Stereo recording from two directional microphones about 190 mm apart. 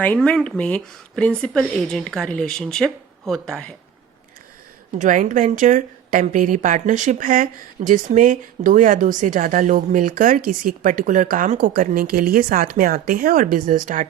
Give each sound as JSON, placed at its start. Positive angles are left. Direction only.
{"t": 0.0, "sound": "speech", "side_deg": 5}
{"t": 4.9, "sound": "a woman's voice", "side_deg": -40}